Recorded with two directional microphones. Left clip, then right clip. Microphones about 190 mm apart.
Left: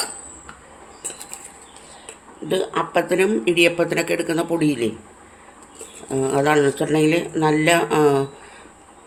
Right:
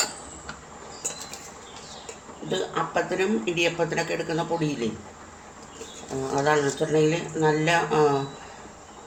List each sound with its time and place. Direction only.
2.5 s speech: 60° left (ahead or behind)
6.2 s speech: 60° left (ahead or behind)